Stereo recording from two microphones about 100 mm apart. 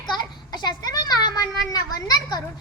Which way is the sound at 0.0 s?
45° left (ahead or behind).